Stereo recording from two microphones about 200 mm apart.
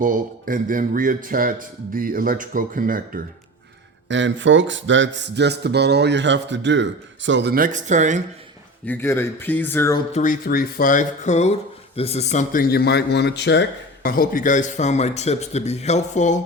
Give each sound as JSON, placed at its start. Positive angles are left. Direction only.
{"t": 0.0, "sound": "speech", "side_deg": -45}
{"t": 4.1, "sound": "speech", "side_deg": -65}
{"t": 8.9, "sound": "speech", "side_deg": 10}
{"t": 10.1, "sound": "a man's voice", "side_deg": 40}